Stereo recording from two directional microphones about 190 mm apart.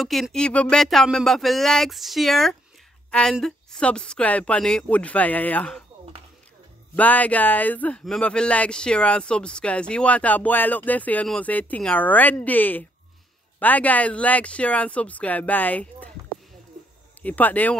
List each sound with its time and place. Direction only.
0.0 s speech: centre (ahead or behind)
7.0 s speech: 10° left (ahead or behind)
17.2 s speech: 10° left (ahead or behind)